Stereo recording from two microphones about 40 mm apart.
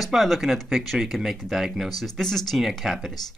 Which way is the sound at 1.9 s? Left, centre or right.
Centre.